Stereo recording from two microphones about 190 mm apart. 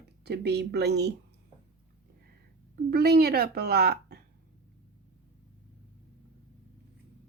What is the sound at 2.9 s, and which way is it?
A woman's voice, 55° right (ahead or behind).